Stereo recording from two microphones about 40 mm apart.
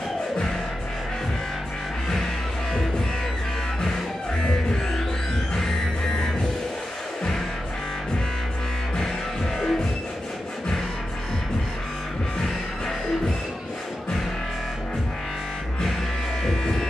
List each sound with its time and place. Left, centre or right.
4.4 s music: centre
9.6 s music: centre
16.4 s music: centre